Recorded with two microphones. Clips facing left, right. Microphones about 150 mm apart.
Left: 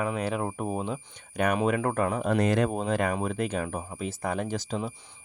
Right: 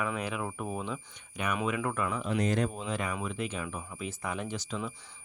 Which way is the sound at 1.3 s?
45° left (ahead or behind).